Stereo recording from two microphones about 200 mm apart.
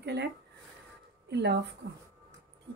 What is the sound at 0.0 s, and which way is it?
Speech, 55° right (ahead or behind).